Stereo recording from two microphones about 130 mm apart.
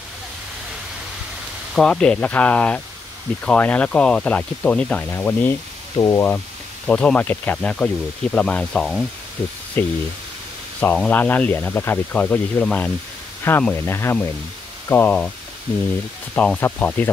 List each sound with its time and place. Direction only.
1.8 s speech: 5° left (ahead or behind)
5.9 s speech: 25° left (ahead or behind)
6.9 s speech: 10° left (ahead or behind)
9.4 s speech: 15° left (ahead or behind)
11.1 s speech: 15° left (ahead or behind)
16.3 s speech: 10° left (ahead or behind)